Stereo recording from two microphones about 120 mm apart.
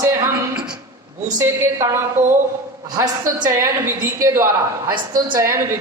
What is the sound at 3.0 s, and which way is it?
A woman's voice, 25° right (ahead or behind).